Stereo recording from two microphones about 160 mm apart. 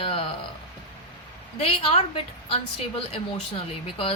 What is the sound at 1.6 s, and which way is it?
A woman's voice, 35° left (ahead or behind).